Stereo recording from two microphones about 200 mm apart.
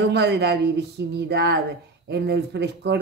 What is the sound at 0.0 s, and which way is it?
Speech, 55° right (ahead or behind).